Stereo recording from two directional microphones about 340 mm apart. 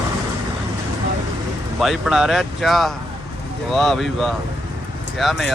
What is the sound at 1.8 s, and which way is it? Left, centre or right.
Speech, centre.